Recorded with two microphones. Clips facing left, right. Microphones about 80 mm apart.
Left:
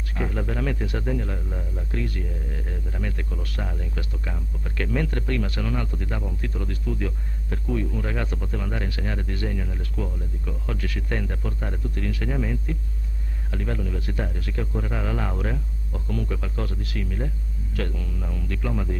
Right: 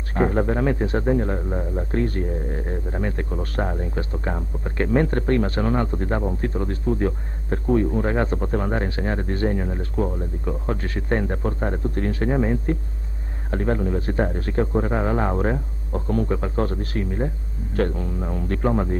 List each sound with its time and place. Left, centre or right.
0.1 s a man's voice: right